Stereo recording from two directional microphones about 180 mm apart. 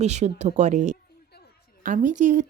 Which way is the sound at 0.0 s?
40° right (ahead or behind).